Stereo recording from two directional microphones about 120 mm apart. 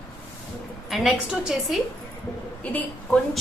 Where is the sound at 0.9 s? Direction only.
Centre (ahead or behind).